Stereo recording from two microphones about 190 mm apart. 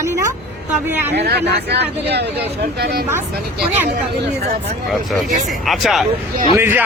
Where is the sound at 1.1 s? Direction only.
60° right (ahead or behind).